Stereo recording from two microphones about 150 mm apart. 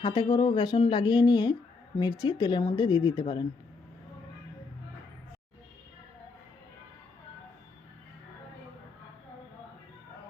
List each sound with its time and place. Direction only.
0.0 s speech: 30° left (ahead or behind)